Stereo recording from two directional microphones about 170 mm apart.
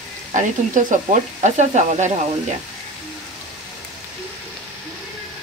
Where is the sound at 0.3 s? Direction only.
45° right (ahead or behind).